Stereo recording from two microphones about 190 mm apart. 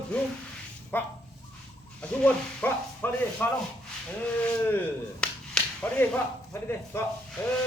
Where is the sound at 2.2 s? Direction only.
10° left (ahead or behind).